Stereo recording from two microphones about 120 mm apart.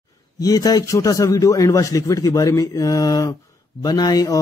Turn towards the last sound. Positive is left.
turn(degrees=30)  # may be behind; listen again after turning